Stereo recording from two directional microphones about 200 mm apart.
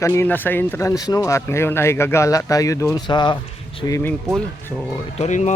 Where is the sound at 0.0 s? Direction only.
15° left (ahead or behind).